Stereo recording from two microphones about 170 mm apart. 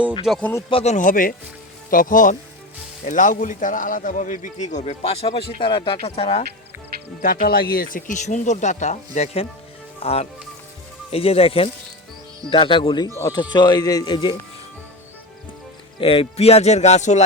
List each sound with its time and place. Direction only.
0.3 s speech: centre (ahead or behind)
0.7 s speech: 35° left (ahead or behind)
0.9 s a man's voice: 55° left (ahead or behind); by 6.4 s 35° left (ahead or behind)
7.2 s a man's voice: 55° left (ahead or behind); by 14.3 s 25° left (ahead or behind)
16.0 s speech: 35° left (ahead or behind)